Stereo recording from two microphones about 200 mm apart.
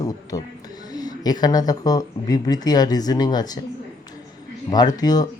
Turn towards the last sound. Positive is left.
turn(degrees=20)  # may be behind; listen again after turning